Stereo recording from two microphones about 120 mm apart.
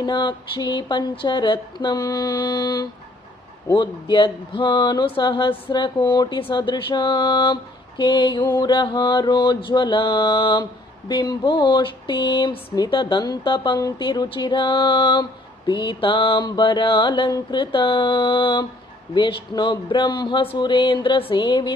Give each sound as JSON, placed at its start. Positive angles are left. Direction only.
{"t": 0.0, "sound": "mantra", "side_deg": 40}